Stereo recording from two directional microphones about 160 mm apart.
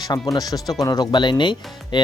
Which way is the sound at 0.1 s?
20° left (ahead or behind).